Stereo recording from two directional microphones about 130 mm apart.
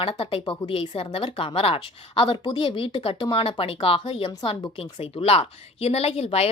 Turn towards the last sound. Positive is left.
turn(degrees=50)  # may be behind; listen again after turning